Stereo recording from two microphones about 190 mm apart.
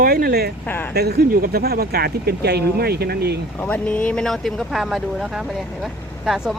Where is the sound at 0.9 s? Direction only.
55° right (ahead or behind).